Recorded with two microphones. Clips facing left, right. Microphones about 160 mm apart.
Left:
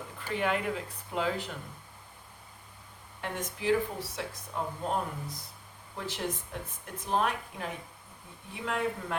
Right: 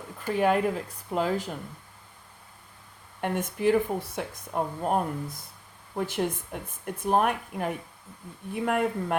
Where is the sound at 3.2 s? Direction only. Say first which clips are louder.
Right 6 dB; 55° right (ahead or behind).